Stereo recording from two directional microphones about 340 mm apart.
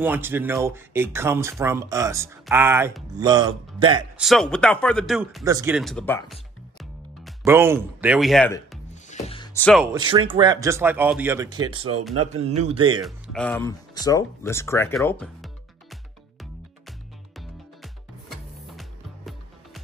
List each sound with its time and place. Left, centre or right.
0.0 s speech: centre
4.2 s speech: centre
9.1 s music: centre
9.9 s speech: centre
13.0 s speech: centre
17.4 s music: centre